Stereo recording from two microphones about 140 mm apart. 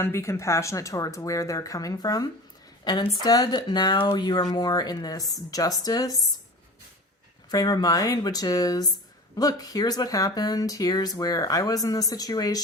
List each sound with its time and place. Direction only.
0.0 s speech: 20° left (ahead or behind)
7.5 s speech: 25° left (ahead or behind)